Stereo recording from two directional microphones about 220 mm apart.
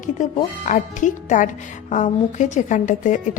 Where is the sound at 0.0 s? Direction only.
35° left (ahead or behind).